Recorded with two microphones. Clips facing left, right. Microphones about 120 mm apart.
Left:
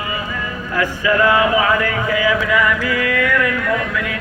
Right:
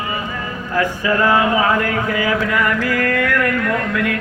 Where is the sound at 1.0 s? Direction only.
35° right (ahead or behind).